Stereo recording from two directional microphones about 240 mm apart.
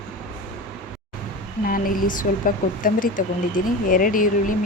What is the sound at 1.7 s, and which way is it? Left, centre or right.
Speech, left.